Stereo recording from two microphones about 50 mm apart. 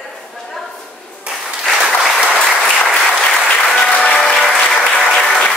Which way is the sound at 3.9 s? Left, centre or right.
Left.